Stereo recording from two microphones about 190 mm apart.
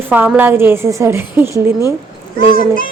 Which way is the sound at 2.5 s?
45° left (ahead or behind).